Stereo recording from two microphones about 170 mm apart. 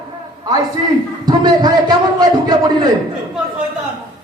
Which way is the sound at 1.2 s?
25° right (ahead or behind).